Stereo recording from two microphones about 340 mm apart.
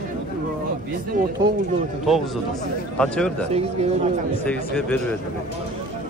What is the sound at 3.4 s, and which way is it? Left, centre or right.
Speech, centre.